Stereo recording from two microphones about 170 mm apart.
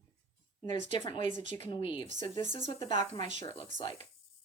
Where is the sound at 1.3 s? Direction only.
45° right (ahead or behind).